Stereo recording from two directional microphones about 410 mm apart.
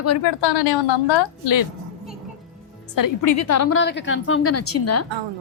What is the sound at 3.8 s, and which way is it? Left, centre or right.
A woman's voice, left.